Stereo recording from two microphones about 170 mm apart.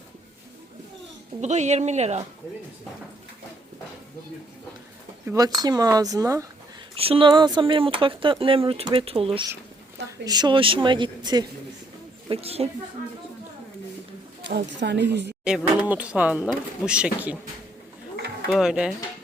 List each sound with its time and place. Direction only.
1.4 s speech: 45° right (ahead or behind)
5.2 s speech: 15° right (ahead or behind)
6.9 s speech: 35° right (ahead or behind)
12.3 s speech: 35° right (ahead or behind)
14.4 s speech: 90° right
15.4 s speech: 5° right (ahead or behind)
18.4 s speech: 5° right (ahead or behind)